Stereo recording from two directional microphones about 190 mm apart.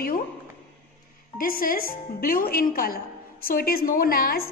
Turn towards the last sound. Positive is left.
turn(degrees=50)  # may be behind; listen again after turning